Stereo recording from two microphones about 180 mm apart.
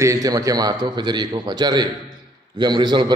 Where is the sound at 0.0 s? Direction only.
20° right (ahead or behind).